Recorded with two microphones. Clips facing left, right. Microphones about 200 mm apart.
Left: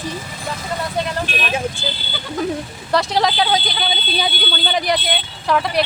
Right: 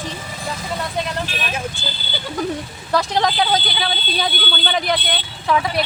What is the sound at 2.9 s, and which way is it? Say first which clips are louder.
A man's voice: left 1 dB; centre (ahead or behind).